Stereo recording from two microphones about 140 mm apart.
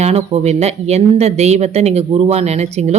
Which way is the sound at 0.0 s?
50° right (ahead or behind).